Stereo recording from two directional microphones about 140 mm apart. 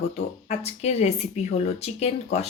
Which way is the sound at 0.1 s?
50° left (ahead or behind).